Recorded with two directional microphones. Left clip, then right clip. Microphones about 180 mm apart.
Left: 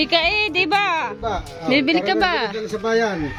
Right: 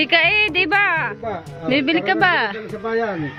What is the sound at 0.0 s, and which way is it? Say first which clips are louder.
A woman's voice: right 3 dB; 10° left (ahead or behind).